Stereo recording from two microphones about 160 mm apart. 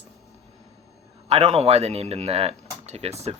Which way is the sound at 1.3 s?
40° right (ahead or behind).